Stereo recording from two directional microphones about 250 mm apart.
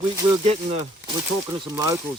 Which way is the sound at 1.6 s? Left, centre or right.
Centre.